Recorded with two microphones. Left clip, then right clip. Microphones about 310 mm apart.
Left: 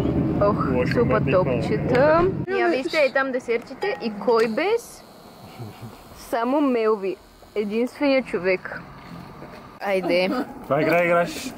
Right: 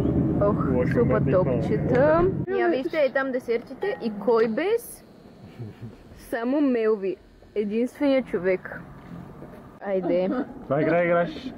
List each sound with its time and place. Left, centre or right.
0.0 s speech: centre
6.3 s speech: centre
9.8 s speech: centre